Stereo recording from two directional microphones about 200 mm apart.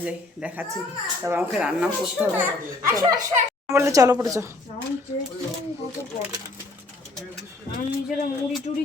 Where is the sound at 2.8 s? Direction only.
20° right (ahead or behind).